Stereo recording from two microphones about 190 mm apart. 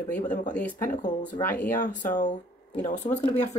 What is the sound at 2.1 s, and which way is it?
Speech, 40° left (ahead or behind).